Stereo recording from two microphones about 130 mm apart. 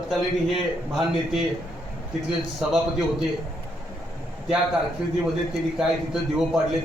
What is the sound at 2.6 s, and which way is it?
Speech, 5° right (ahead or behind).